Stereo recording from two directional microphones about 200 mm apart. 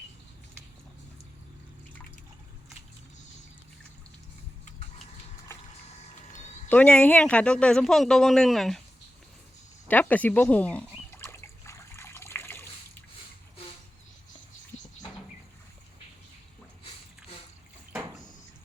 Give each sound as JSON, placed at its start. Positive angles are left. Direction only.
{"t": 6.3, "sound": "a sound", "side_deg": 35}
{"t": 6.7, "sound": "speech", "side_deg": 10}
{"t": 9.9, "sound": "speech", "side_deg": 10}
{"t": 11.1, "sound": "water", "side_deg": 10}